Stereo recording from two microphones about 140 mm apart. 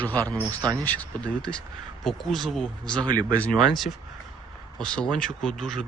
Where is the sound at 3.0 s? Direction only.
30° right (ahead or behind).